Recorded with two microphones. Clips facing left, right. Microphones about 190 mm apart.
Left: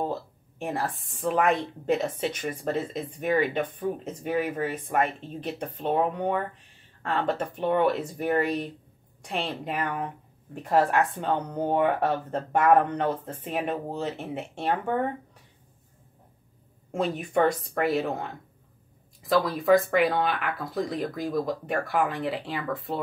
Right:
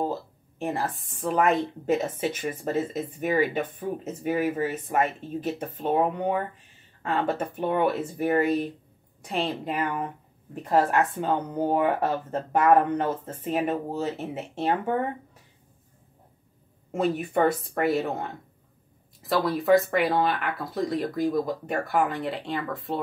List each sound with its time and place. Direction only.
0.6 s a woman's voice: centre (ahead or behind)
16.9 s a woman's voice: 5° right (ahead or behind)